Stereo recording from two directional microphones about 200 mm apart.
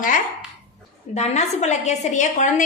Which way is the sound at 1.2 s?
35° left (ahead or behind).